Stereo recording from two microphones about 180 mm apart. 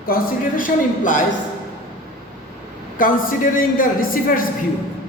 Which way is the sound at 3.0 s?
50° left (ahead or behind).